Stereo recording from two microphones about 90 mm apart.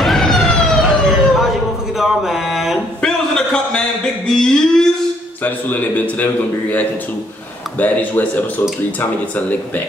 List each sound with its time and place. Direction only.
0.0 s police car: centre (ahead or behind)
2.0 s a sound: 5° right (ahead or behind)
5.4 s a man's voice: 20° left (ahead or behind)